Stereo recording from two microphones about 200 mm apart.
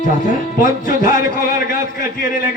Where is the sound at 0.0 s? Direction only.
40° left (ahead or behind).